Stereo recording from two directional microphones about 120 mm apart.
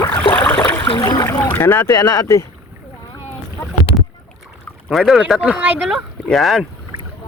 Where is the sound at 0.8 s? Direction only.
45° left (ahead or behind).